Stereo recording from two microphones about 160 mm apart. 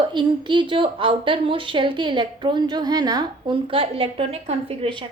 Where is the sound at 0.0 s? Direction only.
30° right (ahead or behind).